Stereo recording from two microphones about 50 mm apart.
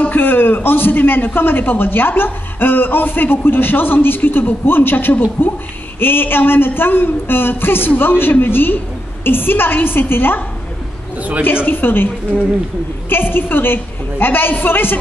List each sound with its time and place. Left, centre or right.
0.0 s a man's voice: left
11.4 s a man's voice: left
13.1 s a man's voice: left